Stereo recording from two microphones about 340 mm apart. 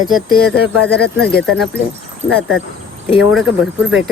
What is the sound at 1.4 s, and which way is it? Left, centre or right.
Speech, centre.